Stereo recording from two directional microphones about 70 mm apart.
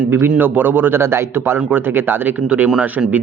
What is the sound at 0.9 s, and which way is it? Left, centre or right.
Speech, right.